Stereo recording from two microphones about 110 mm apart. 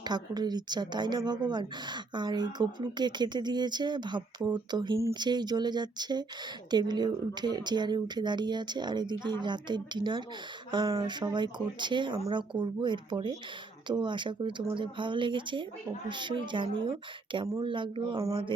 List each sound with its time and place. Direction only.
0.0 s a woman's voice: 40° right (ahead or behind)